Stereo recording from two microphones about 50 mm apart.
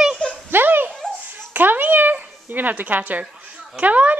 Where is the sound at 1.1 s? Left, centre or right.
Right.